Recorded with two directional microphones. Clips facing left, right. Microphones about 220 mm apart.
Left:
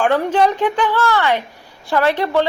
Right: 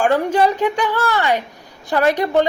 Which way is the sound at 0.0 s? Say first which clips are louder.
Even; 10° right (ahead or behind).